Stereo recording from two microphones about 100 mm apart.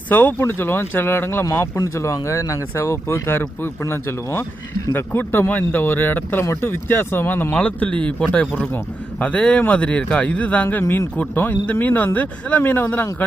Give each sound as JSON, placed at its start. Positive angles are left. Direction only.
{"t": 0.1, "sound": "speech", "side_deg": 20}